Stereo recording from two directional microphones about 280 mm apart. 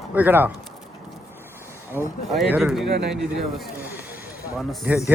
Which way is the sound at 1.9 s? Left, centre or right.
Centre.